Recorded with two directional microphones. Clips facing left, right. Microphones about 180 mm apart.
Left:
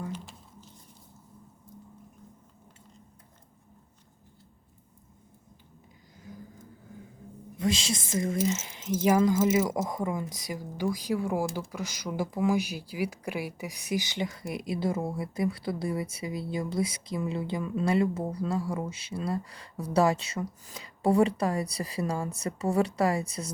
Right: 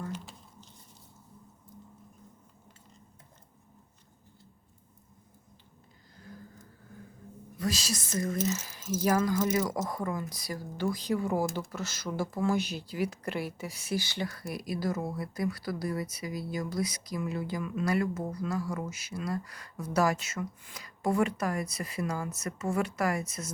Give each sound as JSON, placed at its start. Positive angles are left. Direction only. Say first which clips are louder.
{"t": 7.6, "sound": "speech", "louder": "left 4 dB", "side_deg": 25}